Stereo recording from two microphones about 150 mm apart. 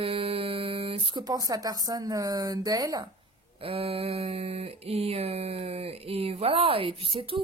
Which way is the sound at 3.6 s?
40° right (ahead or behind).